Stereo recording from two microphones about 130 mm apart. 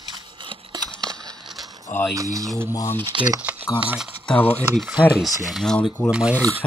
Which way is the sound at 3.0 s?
40° right (ahead or behind).